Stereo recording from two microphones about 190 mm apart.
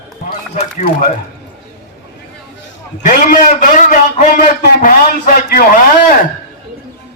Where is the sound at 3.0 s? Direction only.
45° left (ahead or behind).